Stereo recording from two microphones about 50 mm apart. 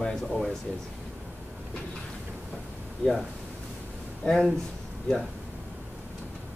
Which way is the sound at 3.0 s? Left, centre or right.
Left.